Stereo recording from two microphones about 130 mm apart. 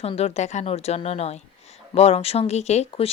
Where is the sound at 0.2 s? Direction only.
60° left (ahead or behind).